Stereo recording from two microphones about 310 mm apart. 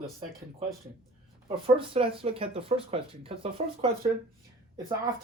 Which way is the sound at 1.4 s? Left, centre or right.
Centre.